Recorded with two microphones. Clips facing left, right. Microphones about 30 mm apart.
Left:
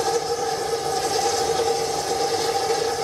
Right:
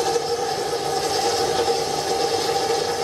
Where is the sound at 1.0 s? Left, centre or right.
Right.